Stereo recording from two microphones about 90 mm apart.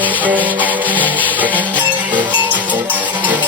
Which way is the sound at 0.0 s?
20° right (ahead or behind).